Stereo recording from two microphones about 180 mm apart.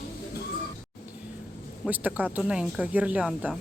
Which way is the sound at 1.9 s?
10° right (ahead or behind).